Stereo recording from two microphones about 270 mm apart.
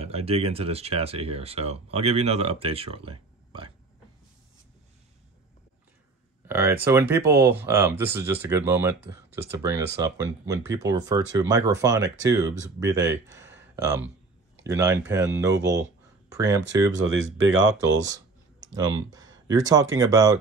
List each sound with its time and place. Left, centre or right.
0.0 s speech: right
6.4 s speech: centre
17.0 s speech: right
17.7 s speech: centre